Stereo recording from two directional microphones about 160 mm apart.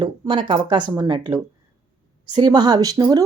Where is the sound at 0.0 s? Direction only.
30° right (ahead or behind).